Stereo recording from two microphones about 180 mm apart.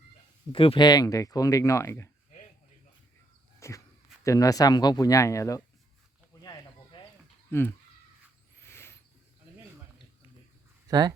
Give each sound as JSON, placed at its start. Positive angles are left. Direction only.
{"t": 0.5, "sound": "speech", "side_deg": 30}
{"t": 3.6, "sound": "speech", "side_deg": 15}
{"t": 6.4, "sound": "snake", "side_deg": 20}
{"t": 7.5, "sound": "speech", "side_deg": 10}
{"t": 8.6, "sound": "a sound", "side_deg": 15}
{"t": 10.8, "sound": "speech", "side_deg": -20}